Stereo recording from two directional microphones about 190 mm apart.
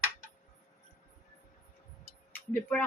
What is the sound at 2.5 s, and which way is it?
Speech, 5° left (ahead or behind).